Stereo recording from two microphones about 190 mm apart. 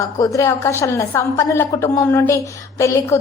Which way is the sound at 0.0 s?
15° left (ahead or behind).